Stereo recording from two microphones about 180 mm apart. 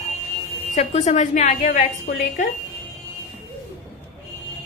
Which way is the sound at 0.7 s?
35° left (ahead or behind).